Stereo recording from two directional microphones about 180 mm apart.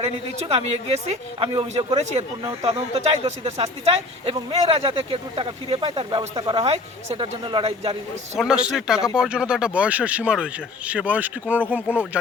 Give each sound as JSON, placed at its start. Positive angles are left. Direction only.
{"t": 0.0, "sound": "speech", "side_deg": -35}
{"t": 8.4, "sound": "a man's voice", "side_deg": -5}